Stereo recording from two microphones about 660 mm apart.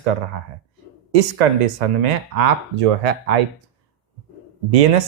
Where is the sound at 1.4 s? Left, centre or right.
Right.